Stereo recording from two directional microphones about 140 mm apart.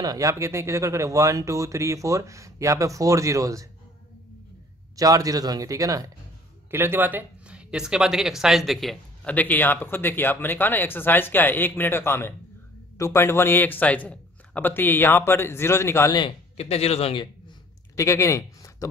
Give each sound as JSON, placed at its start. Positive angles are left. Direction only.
{"t": 0.0, "sound": "speech", "side_deg": -25}
{"t": 4.9, "sound": "speech", "side_deg": -25}
{"t": 9.3, "sound": "a man's voice", "side_deg": 10}
{"t": 16.5, "sound": "speech", "side_deg": 45}
{"t": 17.9, "sound": "speech", "side_deg": 20}